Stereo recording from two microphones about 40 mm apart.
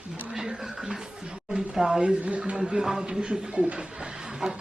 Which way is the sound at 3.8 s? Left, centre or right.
Right.